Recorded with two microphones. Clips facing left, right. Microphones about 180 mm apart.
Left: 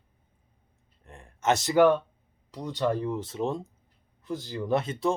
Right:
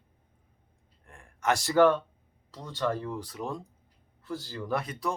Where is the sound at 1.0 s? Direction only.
20° left (ahead or behind).